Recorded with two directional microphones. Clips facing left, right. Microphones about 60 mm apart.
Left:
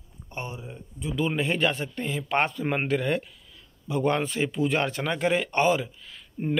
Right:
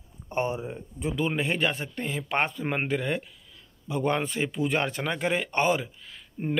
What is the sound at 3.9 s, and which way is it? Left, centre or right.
Speech, right.